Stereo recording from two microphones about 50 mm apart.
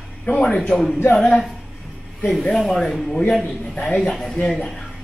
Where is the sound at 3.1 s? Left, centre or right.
Centre.